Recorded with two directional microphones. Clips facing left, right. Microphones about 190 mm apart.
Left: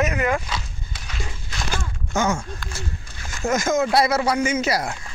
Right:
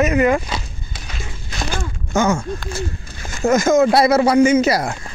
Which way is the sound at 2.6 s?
30° right (ahead or behind).